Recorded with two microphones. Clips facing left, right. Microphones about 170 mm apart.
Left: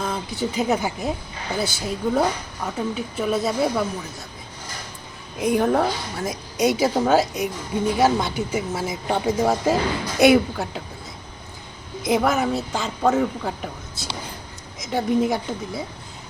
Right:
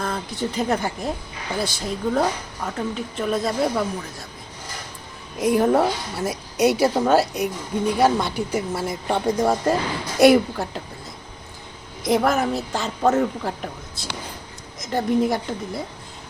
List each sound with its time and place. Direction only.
0.0 s a woman's voice: 5° left (ahead or behind)
5.4 s a woman's voice: centre (ahead or behind)
12.0 s a woman's voice: centre (ahead or behind)